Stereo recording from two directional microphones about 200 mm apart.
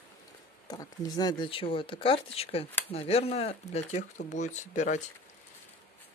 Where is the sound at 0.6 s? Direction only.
20° left (ahead or behind); by 5.0 s 35° left (ahead or behind).